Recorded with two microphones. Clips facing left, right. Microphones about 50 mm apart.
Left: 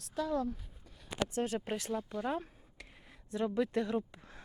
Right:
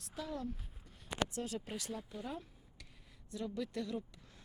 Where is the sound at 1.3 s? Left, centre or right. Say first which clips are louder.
Left 7 dB; left.